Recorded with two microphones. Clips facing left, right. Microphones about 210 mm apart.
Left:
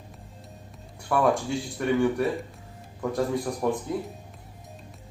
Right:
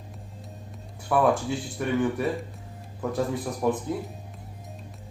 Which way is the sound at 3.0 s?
Centre (ahead or behind).